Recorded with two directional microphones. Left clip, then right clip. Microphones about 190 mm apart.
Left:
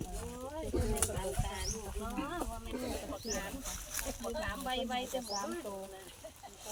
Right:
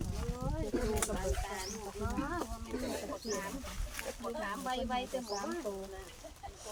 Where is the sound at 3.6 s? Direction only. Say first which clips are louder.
Left 2 dB; 60° left (ahead or behind).